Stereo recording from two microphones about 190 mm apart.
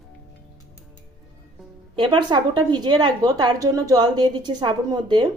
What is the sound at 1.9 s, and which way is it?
A woman's voice, 25° right (ahead or behind).